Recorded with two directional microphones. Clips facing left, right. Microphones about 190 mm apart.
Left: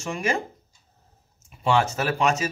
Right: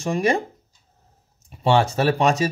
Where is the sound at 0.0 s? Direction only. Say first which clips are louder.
Right 6 dB; 35° right (ahead or behind).